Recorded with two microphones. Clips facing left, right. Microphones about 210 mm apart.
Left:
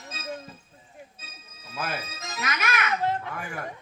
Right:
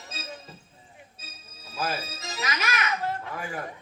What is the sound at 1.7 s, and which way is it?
Music, 55° left (ahead or behind).